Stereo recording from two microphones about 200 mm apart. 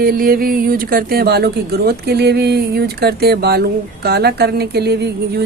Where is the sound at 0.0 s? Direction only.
50° right (ahead or behind).